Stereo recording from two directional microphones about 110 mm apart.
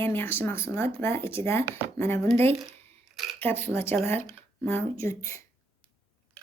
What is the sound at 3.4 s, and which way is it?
Speech, 20° left (ahead or behind).